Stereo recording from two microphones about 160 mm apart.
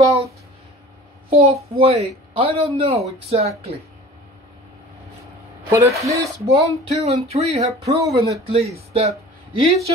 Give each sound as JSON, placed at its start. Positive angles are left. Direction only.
{"t": 0.0, "sound": "a sound", "side_deg": -40}
{"t": 1.3, "sound": "a woman's voice", "side_deg": -40}
{"t": 5.7, "sound": "speech", "side_deg": -20}
{"t": 6.4, "sound": "a woman's voice", "side_deg": -40}